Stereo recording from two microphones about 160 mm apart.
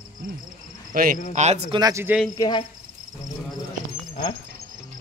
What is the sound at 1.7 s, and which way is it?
Speech, 20° right (ahead or behind).